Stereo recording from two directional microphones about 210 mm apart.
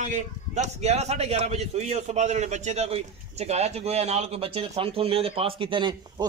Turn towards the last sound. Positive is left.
turn(degrees=-25)  # may be behind; listen again after turning